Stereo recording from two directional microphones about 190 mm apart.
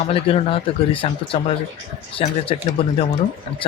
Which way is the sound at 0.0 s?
30° left (ahead or behind).